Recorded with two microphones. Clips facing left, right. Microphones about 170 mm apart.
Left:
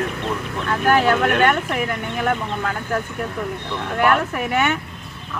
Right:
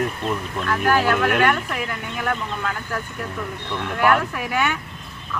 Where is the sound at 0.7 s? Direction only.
25° left (ahead or behind).